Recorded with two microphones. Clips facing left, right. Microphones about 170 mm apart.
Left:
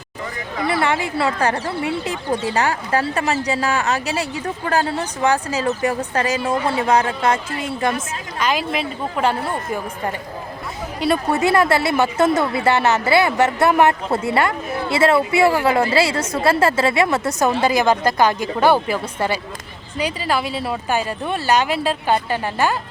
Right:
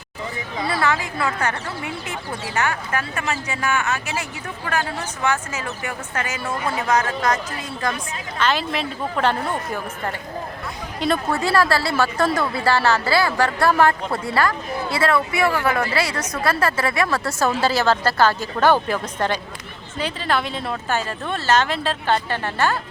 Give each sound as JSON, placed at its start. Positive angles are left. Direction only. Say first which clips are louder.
{"t": 0.7, "sound": "speech", "louder": "left 3 dB", "side_deg": 25}
{"t": 8.4, "sound": "speech", "louder": "left 1 dB", "side_deg": 10}
{"t": 11.3, "sound": "speech", "louder": "left 4 dB", "side_deg": 20}